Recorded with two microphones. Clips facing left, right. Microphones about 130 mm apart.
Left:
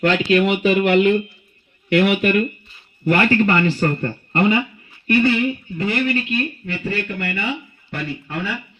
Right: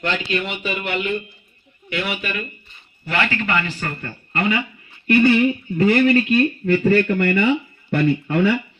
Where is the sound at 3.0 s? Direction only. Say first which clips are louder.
Left 7 dB; 40° left (ahead or behind); by 4.6 s 25° left (ahead or behind).